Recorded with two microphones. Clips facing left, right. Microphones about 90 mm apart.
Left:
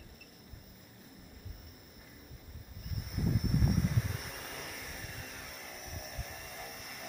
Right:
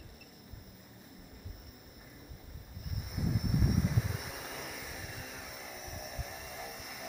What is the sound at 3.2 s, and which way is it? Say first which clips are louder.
Vehicle: left 1 dB; centre (ahead or behind).